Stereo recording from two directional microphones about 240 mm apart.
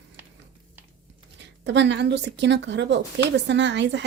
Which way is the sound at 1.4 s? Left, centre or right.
Right.